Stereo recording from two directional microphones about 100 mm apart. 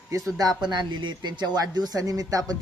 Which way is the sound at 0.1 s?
35° right (ahead or behind).